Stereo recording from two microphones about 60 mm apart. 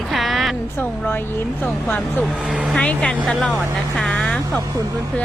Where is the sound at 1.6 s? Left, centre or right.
Left.